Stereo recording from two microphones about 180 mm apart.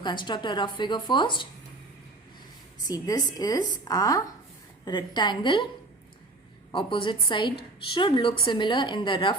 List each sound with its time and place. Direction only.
0.0 s a woman's voice: 25° left (ahead or behind)
2.8 s a woman's voice: 20° left (ahead or behind)
6.7 s a woman's voice: 25° left (ahead or behind)